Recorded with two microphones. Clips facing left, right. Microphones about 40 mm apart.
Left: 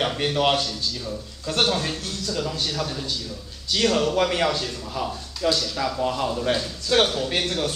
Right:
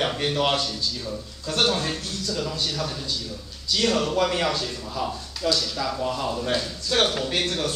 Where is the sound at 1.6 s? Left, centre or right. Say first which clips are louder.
Even; centre.